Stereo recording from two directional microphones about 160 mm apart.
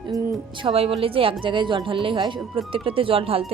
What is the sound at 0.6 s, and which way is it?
Speech, 35° right (ahead or behind).